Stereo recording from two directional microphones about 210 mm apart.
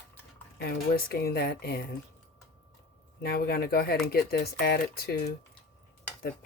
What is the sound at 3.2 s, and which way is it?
Speech, 50° left (ahead or behind).